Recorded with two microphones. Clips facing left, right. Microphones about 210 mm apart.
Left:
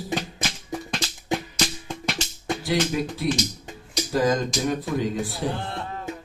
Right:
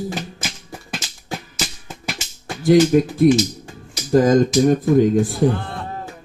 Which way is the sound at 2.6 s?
50° right (ahead or behind).